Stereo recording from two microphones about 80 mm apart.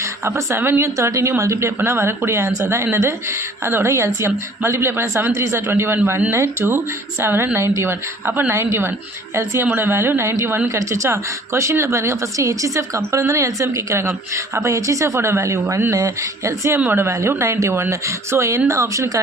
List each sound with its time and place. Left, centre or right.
0.3 s speech: right
16.7 s speech: right